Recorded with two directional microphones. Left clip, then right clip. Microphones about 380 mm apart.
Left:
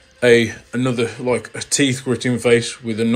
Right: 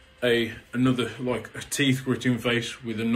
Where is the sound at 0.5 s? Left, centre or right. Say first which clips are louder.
Left 4 dB; centre.